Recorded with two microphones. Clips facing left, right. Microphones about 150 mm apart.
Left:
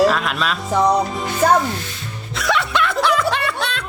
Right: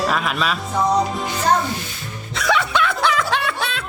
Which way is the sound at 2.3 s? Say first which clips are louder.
Even; centre (ahead or behind).